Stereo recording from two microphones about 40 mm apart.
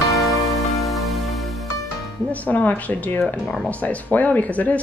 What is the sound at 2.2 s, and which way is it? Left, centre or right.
Speech, left.